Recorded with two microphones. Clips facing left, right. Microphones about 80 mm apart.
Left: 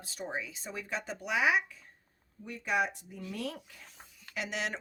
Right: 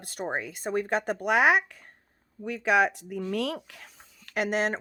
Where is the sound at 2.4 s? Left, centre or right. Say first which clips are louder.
Right 8 dB; right.